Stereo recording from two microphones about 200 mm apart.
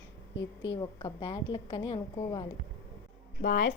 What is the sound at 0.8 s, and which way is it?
A woman's voice, 20° left (ahead or behind).